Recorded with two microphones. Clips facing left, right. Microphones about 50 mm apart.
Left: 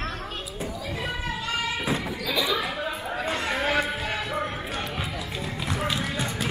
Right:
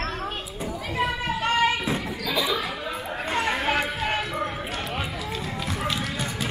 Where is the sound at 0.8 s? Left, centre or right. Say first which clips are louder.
Right 7 dB; right.